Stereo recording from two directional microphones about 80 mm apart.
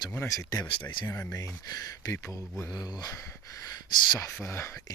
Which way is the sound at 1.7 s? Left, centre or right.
Left.